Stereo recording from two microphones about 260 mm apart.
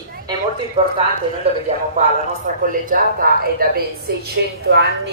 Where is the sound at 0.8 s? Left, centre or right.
Right.